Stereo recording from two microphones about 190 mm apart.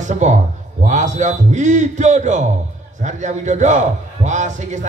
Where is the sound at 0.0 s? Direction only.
40° right (ahead or behind).